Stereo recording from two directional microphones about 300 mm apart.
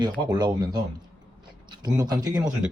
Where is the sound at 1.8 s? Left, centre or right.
Centre.